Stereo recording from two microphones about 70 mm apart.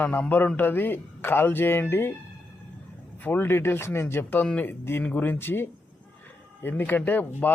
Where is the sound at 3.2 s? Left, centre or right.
Left.